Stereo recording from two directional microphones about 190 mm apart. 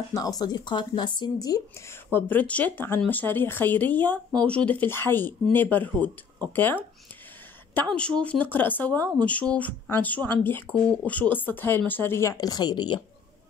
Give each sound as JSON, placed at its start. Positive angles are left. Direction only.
{"t": 0.1, "sound": "speech", "side_deg": 20}
{"t": 2.1, "sound": "speech", "side_deg": 10}